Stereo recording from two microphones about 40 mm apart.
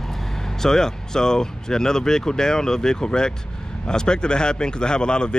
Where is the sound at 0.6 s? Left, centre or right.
Centre.